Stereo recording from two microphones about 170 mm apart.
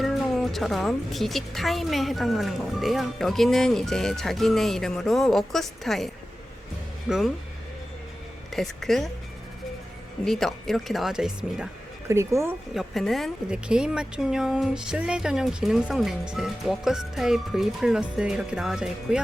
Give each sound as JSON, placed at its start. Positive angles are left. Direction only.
{"t": 0.0, "sound": "a woman's voice", "side_deg": 0}
{"t": 7.1, "sound": "a woman's voice", "side_deg": 0}
{"t": 8.5, "sound": "a woman's voice", "side_deg": 0}
{"t": 10.2, "sound": "a woman's voice", "side_deg": 0}
{"t": 12.0, "sound": "speech", "side_deg": -15}
{"t": 12.7, "sound": "a woman's voice", "side_deg": 0}